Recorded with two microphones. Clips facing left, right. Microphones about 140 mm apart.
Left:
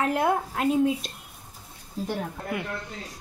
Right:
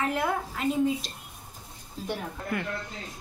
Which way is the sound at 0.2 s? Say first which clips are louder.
Left 4 dB; 55° left (ahead or behind).